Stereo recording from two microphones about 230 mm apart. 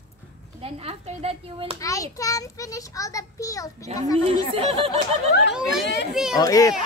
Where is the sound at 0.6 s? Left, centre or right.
Right.